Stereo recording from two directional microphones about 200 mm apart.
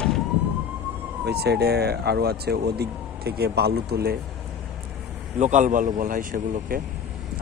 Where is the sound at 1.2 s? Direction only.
55° right (ahead or behind).